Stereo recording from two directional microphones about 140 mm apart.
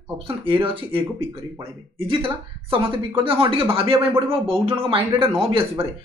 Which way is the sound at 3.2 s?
40° right (ahead or behind).